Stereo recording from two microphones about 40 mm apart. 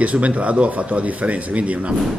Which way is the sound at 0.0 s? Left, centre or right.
Right.